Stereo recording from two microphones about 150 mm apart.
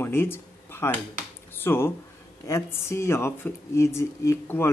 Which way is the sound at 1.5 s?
15° left (ahead or behind).